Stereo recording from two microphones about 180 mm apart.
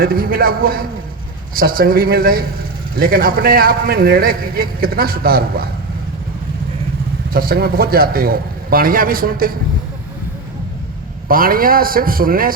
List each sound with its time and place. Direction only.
0.0 s a man's voice: 55° right (ahead or behind)
7.3 s a man's voice: 55° right (ahead or behind)
11.3 s a man's voice: 50° right (ahead or behind)